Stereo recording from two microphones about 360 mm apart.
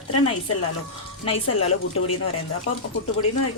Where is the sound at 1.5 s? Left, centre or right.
Left.